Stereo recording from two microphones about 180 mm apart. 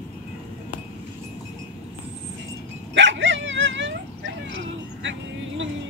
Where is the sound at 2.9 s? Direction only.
90° right.